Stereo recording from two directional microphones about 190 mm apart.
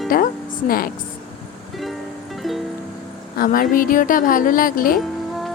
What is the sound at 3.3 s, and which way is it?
Speech, 50° left (ahead or behind).